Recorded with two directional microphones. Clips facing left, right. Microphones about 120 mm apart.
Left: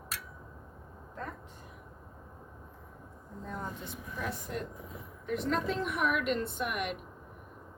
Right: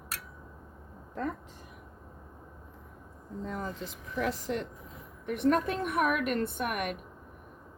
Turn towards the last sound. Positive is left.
turn(degrees=-55)  # may be behind; listen again after turning